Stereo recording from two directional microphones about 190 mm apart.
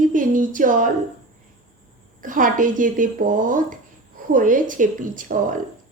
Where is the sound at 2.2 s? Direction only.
45° right (ahead or behind).